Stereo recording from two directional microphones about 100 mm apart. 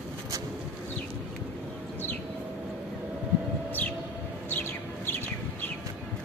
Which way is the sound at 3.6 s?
20° left (ahead or behind).